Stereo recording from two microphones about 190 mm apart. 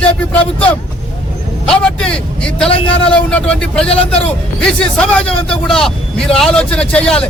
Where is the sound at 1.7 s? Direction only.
5° left (ahead or behind).